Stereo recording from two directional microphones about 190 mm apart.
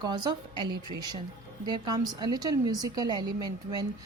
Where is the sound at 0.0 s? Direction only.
20° right (ahead or behind).